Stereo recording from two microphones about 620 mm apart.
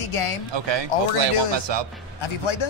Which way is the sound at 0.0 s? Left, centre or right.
Left.